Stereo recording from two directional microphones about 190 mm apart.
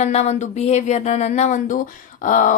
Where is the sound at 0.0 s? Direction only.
35° left (ahead or behind).